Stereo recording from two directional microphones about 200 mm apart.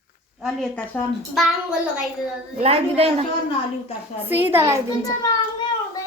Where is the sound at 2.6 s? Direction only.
30° right (ahead or behind).